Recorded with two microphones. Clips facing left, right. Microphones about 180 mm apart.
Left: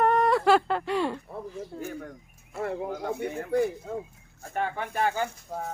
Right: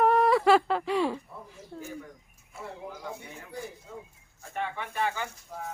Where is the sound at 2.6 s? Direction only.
65° left (ahead or behind).